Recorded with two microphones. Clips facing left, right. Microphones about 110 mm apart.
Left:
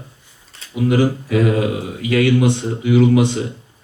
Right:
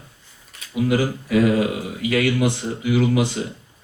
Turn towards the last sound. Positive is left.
turn(degrees=25)  # may be behind; listen again after turning